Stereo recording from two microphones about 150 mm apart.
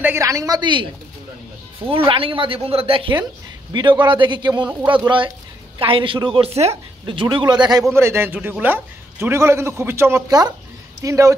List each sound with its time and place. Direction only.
0.0 s a woman's voice: 20° right (ahead or behind)
1.9 s a woman's voice: 35° right (ahead or behind)
7.9 s a man's voice: 15° right (ahead or behind)